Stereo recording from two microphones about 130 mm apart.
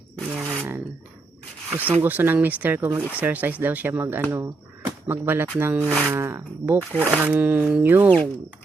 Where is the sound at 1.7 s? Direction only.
10° right (ahead or behind).